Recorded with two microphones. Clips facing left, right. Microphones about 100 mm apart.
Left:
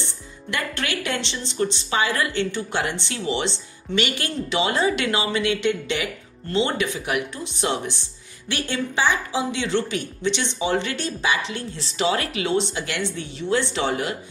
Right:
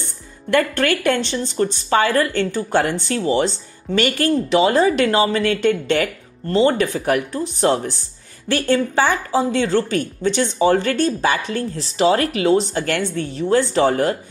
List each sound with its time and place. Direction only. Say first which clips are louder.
0.5 s speech: right 10 dB; 50° right (ahead or behind)